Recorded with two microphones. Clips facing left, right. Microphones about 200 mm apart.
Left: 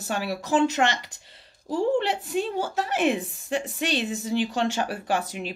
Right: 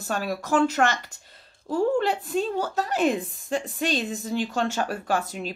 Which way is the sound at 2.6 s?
40° right (ahead or behind).